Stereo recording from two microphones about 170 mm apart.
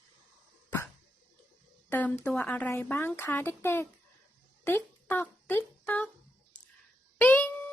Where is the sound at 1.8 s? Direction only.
10° left (ahead or behind).